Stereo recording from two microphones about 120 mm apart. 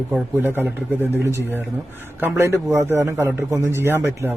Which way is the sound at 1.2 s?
20° right (ahead or behind).